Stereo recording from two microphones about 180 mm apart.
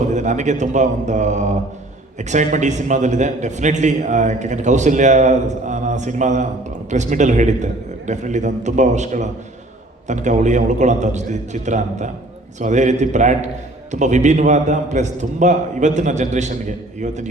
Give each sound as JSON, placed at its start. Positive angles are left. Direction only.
{"t": 0.1, "sound": "a man's voice", "side_deg": -40}